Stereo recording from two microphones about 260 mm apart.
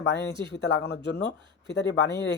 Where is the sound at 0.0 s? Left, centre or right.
Left.